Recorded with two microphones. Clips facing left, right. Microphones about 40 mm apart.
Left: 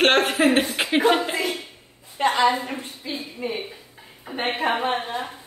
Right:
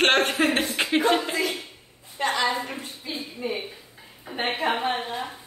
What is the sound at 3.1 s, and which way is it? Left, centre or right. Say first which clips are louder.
Speech: left 3 dB; left.